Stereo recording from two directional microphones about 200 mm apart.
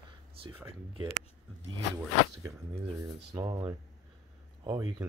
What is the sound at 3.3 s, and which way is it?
Speech, 20° right (ahead or behind).